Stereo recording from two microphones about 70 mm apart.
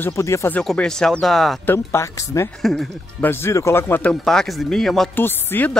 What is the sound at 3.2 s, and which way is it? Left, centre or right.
Speech, left.